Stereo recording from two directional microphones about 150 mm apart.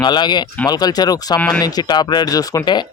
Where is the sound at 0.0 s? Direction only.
30° left (ahead or behind).